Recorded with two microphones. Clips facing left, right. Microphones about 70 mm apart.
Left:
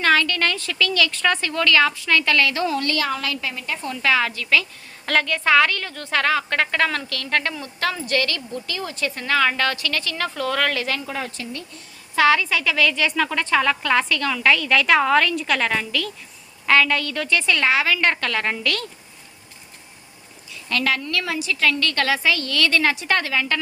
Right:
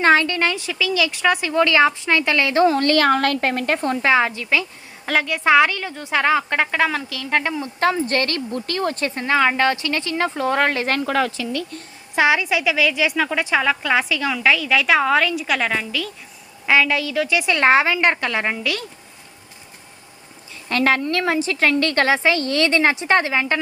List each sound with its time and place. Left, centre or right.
0.0 s a woman's voice: right
4.0 s a woman's voice: right
5.0 s a woman's voice: centre; by 9.0 s right
9.0 s a woman's voice: right
10.8 s a woman's voice: right
11.1 s a woman's voice: right
12.1 s a woman's voice: centre
17.6 s a woman's voice: right
18.5 s a woman's voice: centre
20.7 s a woman's voice: right